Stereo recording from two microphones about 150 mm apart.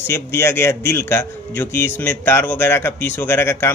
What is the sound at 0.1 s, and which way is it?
Speech, 15° left (ahead or behind).